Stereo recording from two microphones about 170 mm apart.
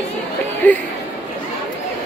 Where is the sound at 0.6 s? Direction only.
10° left (ahead or behind).